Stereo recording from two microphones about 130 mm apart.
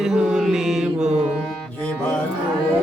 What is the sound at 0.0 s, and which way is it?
Mantra, 5° right (ahead or behind).